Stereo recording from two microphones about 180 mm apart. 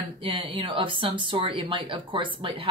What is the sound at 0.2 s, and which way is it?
Speech, 30° right (ahead or behind).